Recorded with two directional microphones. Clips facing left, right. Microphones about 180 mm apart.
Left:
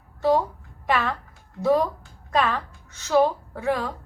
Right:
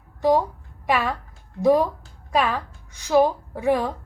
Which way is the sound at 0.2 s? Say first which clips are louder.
Right 2 dB; 15° right (ahead or behind).